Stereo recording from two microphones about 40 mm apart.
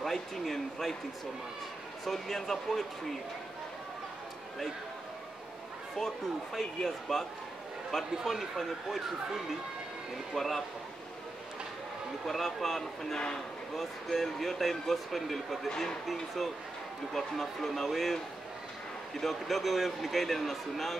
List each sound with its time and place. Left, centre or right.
0.0 s speech: centre
2.0 s speech: centre
5.9 s speech: centre
8.2 s speech: centre
10.3 s speech: centre
12.3 s speech: centre
15.7 s speech: centre
17.1 s speech: centre